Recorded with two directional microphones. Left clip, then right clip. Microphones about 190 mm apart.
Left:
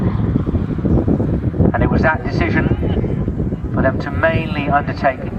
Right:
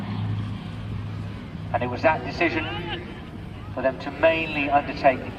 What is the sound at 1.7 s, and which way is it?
Vehicle, 20° right (ahead or behind).